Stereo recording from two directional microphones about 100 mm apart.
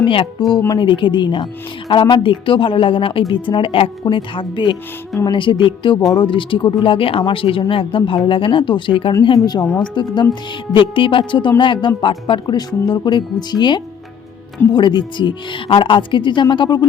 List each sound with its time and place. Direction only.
0.4 s speech: 45° left (ahead or behind)
6.0 s speech: 40° left (ahead or behind)
6.2 s speech: 55° left (ahead or behind)
9.4 s speech: 45° left (ahead or behind)